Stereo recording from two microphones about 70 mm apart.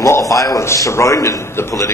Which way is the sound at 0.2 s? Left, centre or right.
Left.